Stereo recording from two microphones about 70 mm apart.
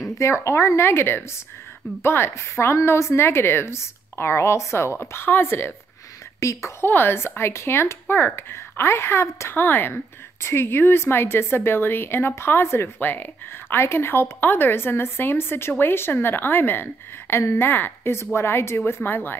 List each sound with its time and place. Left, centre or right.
0.2 s speech: left
6.4 s a woman's voice: left
6.9 s speech: left
9.6 s speech: left